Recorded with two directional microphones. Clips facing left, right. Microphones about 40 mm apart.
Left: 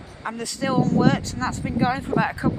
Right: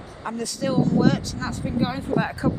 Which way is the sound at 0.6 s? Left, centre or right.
Left.